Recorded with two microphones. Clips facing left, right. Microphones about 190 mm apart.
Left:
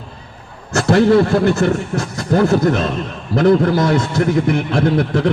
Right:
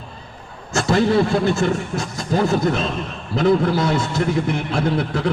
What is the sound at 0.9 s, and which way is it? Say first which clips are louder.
A man's voice: left 5 dB; 55° left (ahead or behind).